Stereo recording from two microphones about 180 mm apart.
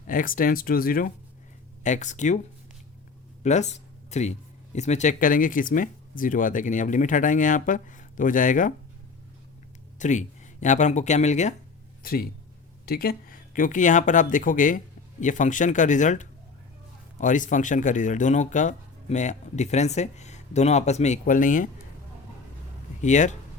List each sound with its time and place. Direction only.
0.1 s speech: 50° left (ahead or behind)
1.8 s speech: 40° left (ahead or behind)
3.4 s speech: 40° left (ahead or behind)
10.0 s speech: 40° left (ahead or behind)
12.8 s speech: 55° left (ahead or behind)
23.0 s speech: 40° left (ahead or behind)